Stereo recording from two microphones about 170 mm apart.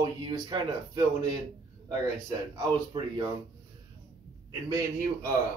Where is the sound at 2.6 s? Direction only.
25° right (ahead or behind).